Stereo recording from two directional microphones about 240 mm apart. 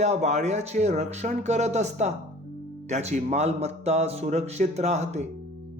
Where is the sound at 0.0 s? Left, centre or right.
Right.